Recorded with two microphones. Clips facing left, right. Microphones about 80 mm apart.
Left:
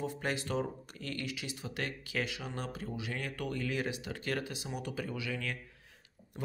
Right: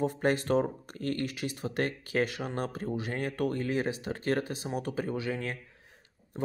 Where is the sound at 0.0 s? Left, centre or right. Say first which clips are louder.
Right 8 dB; right.